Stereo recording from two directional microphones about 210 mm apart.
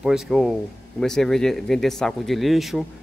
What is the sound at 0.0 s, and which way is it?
Speech, centre (ahead or behind).